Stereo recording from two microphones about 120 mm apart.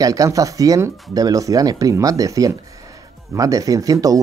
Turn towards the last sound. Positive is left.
turn(degrees=-30)  # may be behind; listen again after turning